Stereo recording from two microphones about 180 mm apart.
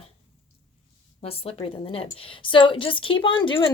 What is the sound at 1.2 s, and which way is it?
Speech, 35° left (ahead or behind).